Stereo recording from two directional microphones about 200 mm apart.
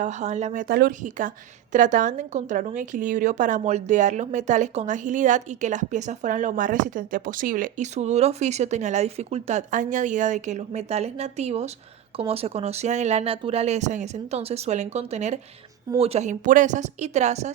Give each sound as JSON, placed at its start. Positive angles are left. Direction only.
{"t": 0.0, "sound": "a woman's voice", "side_deg": -35}